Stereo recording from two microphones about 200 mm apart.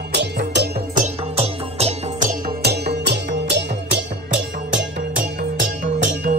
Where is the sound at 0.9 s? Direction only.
35° right (ahead or behind).